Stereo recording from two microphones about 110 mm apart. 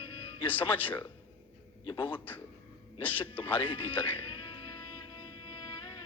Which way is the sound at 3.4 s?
55° left (ahead or behind).